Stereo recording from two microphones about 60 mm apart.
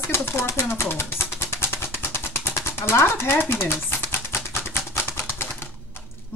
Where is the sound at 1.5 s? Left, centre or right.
Left.